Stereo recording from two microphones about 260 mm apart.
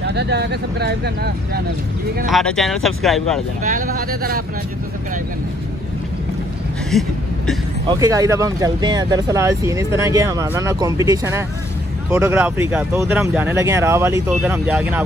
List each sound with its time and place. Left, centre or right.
0.0 s speech: right
2.2 s speech: centre
3.6 s speech: right
6.9 s a sound: centre
8.0 s speech: centre